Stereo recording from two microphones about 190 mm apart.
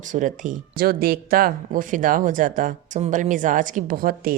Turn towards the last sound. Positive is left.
turn(degrees=-50)  # may be behind; listen again after turning